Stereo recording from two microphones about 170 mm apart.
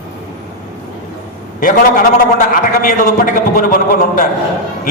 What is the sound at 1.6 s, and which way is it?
A man's voice, 55° left (ahead or behind).